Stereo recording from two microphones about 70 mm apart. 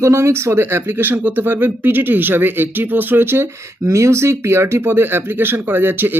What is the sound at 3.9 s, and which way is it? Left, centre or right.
Speech, right.